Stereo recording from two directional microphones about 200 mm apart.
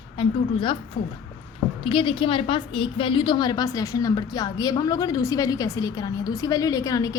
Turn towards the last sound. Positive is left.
turn(degrees=15)  # may be behind; listen again after turning